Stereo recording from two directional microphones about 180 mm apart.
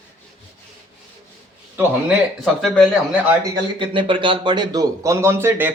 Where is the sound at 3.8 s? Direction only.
30° right (ahead or behind); by 5.7 s 10° right (ahead or behind).